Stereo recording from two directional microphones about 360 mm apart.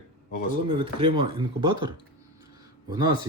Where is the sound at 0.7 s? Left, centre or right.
Centre.